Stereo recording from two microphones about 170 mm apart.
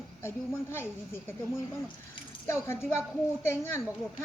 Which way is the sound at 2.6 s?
15° left (ahead or behind).